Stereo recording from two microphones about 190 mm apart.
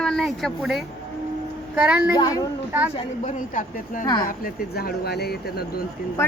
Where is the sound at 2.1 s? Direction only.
20° left (ahead or behind).